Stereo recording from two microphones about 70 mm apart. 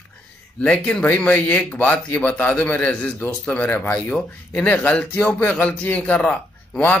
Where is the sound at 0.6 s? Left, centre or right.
Centre.